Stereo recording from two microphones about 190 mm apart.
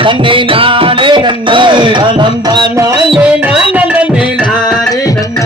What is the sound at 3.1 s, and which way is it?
Music, 5° right (ahead or behind).